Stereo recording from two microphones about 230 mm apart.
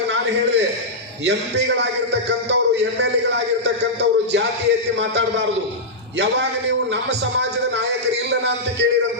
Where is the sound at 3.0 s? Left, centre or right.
Right.